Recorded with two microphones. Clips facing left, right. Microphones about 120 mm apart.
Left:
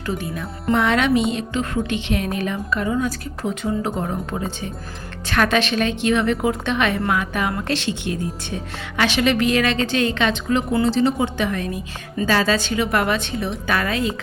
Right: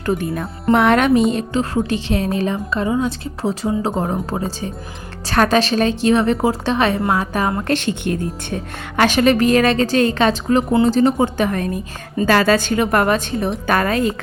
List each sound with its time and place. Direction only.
0.0 s a woman's voice: 50° right (ahead or behind)